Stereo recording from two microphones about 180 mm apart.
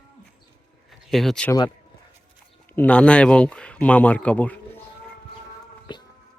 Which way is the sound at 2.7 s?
5° left (ahead or behind).